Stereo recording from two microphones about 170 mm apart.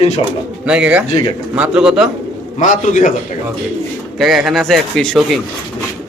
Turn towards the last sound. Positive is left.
turn(degrees=0)  # may be behind; listen again after turning